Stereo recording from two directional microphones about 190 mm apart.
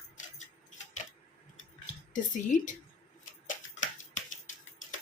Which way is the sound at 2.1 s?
40° left (ahead or behind).